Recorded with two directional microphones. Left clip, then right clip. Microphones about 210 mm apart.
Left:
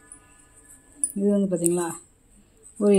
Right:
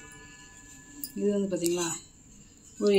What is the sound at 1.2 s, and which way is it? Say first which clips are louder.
Speech: left 5 dB; 50° left (ahead or behind).